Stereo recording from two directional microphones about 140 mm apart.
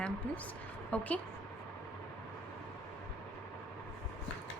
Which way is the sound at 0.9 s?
10° left (ahead or behind).